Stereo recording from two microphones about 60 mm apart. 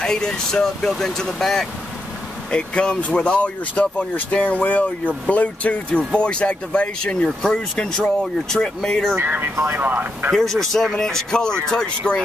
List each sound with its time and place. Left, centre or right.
0.0 s speech: centre
2.5 s speech: centre
9.1 s speech: right
10.3 s speech: centre